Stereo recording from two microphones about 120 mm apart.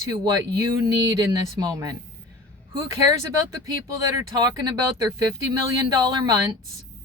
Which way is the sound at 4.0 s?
25° right (ahead or behind).